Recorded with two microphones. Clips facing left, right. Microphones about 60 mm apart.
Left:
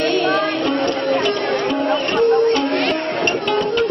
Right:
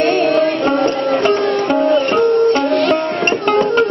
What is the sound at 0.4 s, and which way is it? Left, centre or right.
Music, right.